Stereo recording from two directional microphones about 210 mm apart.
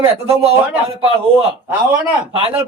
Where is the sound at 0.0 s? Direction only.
30° right (ahead or behind).